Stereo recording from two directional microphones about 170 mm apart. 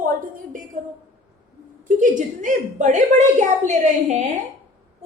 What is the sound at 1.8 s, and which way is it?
A woman's voice, 50° right (ahead or behind).